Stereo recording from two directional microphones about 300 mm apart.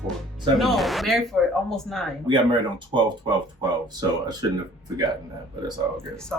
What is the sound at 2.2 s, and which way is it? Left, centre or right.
Speech, centre.